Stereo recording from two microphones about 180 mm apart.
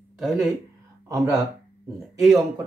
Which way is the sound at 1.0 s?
15° right (ahead or behind).